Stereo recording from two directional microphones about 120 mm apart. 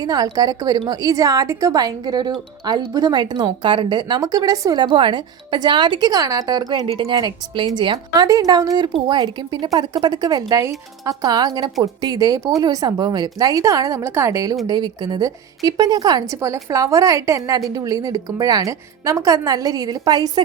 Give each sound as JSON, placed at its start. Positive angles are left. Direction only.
{"t": 0.0, "sound": "a woman's voice", "side_deg": -30}
{"t": 6.9, "sound": "speech", "side_deg": -50}
{"t": 7.2, "sound": "a woman's voice", "side_deg": -40}